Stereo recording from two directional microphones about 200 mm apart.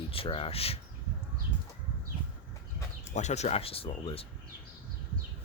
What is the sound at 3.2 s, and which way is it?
Speech, 35° left (ahead or behind).